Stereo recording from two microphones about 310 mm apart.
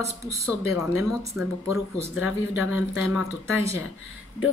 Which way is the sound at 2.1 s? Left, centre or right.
Left.